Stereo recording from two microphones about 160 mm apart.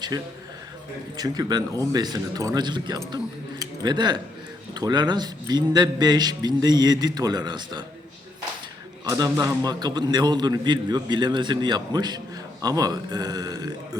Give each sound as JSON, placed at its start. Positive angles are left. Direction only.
{"t": 0.1, "sound": "a man's voice", "side_deg": -25}
{"t": 9.0, "sound": "a man's voice", "side_deg": -20}